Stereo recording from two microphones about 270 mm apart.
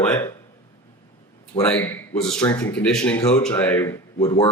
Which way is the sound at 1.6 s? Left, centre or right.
Centre.